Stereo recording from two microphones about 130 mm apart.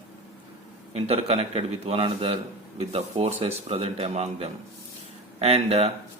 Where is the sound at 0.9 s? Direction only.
50° right (ahead or behind).